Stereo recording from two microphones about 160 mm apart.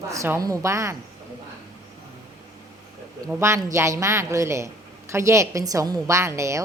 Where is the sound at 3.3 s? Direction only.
15° right (ahead or behind).